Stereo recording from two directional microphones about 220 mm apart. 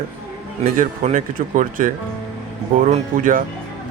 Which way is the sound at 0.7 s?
35° right (ahead or behind).